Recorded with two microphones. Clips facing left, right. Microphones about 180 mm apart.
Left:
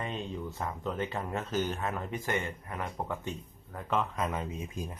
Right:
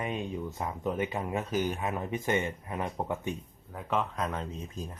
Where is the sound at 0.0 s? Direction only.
10° right (ahead or behind).